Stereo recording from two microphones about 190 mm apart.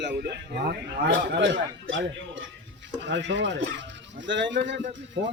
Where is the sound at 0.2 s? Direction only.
55° right (ahead or behind); by 2.4 s 85° right.